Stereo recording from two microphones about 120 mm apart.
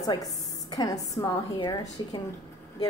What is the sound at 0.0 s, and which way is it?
A woman's voice, 30° left (ahead or behind).